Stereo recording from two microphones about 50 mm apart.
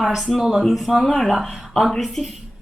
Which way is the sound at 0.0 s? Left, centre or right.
Centre.